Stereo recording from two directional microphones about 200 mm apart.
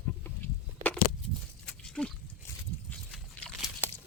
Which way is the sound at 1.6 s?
5° left (ahead or behind).